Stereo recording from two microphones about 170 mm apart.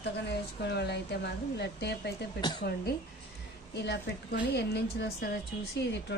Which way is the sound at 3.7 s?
85° left.